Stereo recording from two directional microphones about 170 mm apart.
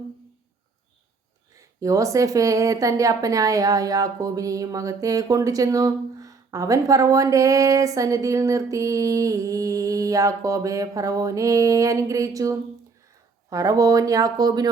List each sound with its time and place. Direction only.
1.5 s speech: 20° right (ahead or behind)